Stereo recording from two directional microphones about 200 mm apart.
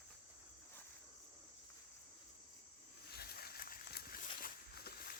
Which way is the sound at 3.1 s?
50° left (ahead or behind).